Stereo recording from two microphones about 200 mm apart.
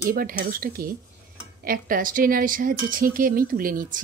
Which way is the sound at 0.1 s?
45° right (ahead or behind).